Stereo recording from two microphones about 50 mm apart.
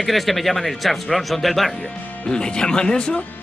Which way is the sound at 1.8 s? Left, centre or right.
Centre.